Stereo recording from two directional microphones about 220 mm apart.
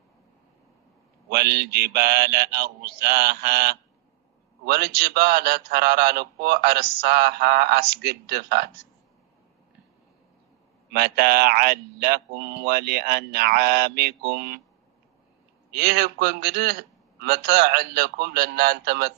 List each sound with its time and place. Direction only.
1.3 s a man's voice: 45° right (ahead or behind)
10.9 s a man's voice: 45° right (ahead or behind)
15.7 s a man's voice: 45° right (ahead or behind)